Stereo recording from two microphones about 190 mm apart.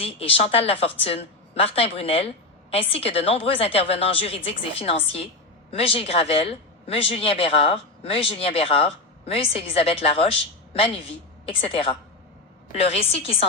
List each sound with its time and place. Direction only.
0.0 s speech: 30° left (ahead or behind)
11.4 s a woman's voice: 30° left (ahead or behind)